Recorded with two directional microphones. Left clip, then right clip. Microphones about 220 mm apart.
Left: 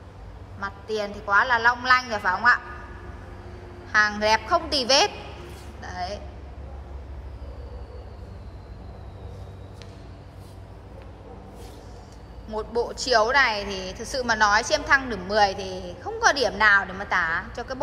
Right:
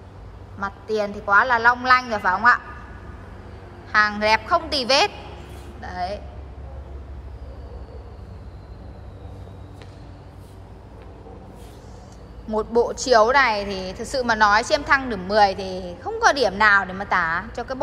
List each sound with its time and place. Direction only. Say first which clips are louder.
0.6 s a woman's voice: right 4 dB; 10° left (ahead or behind)
3.9 s a woman's voice: right 2 dB; 15° left (ahead or behind)
12.4 s a woman's voice: right 7 dB; 5° left (ahead or behind)